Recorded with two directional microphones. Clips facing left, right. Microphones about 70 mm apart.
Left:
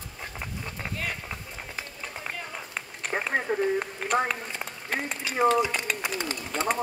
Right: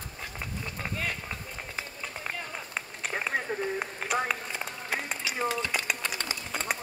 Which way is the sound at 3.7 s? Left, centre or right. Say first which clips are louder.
Left 4 dB; centre.